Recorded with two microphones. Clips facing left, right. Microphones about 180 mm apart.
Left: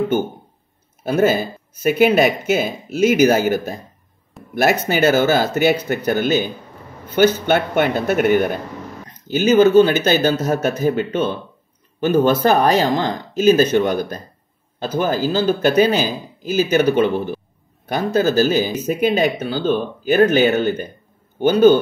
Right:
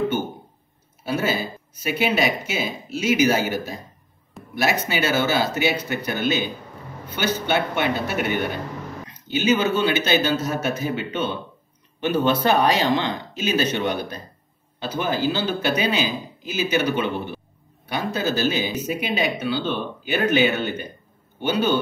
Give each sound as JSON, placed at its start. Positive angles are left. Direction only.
{"t": 1.0, "sound": "speech", "side_deg": 50}